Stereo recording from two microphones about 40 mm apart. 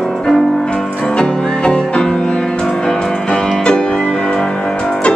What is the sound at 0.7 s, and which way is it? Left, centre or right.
Music, centre.